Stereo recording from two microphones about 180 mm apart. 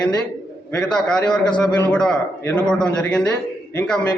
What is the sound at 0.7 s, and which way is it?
A man's voice, 5° left (ahead or behind).